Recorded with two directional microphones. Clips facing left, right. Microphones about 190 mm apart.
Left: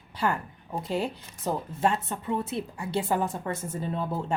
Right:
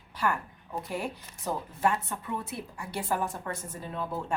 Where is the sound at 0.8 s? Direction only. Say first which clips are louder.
Left 4 dB; 25° left (ahead or behind).